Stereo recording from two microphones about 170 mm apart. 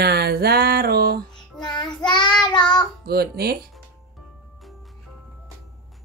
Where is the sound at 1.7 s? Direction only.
25° left (ahead or behind).